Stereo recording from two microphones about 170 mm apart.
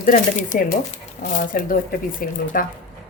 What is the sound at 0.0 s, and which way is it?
Speech, 50° left (ahead or behind).